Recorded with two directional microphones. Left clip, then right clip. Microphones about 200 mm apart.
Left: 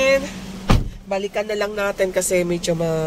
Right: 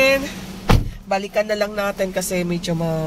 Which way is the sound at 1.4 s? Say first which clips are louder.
Right 3 dB; 5° right (ahead or behind).